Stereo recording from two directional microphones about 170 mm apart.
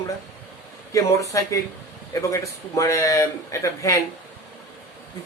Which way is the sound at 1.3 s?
20° left (ahead or behind).